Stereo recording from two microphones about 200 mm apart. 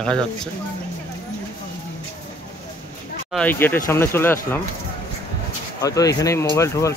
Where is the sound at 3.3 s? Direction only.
5° left (ahead or behind).